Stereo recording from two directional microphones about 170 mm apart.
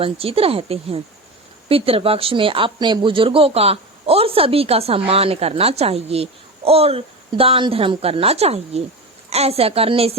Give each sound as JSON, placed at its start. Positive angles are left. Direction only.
{"t": 0.0, "sound": "speech", "side_deg": -35}